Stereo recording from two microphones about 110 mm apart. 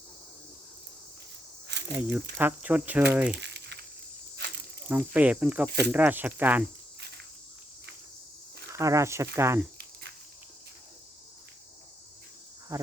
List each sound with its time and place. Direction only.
1.9 s speech: 15° right (ahead or behind)
4.9 s speech: 15° right (ahead or behind)
8.8 s speech: 30° right (ahead or behind)
12.7 s speech: 30° right (ahead or behind)